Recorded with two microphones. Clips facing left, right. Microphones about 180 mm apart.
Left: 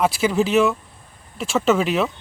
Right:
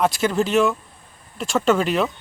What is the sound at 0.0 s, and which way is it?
Speech, 5° left (ahead or behind).